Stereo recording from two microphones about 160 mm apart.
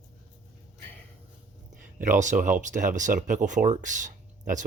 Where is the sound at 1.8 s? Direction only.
55° right (ahead or behind).